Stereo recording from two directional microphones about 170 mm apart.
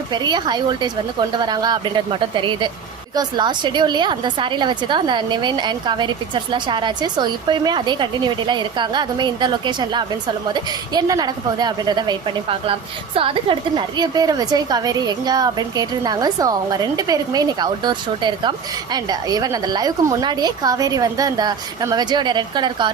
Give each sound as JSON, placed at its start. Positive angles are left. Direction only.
{"t": 0.1, "sound": "a woman's voice", "side_deg": -25}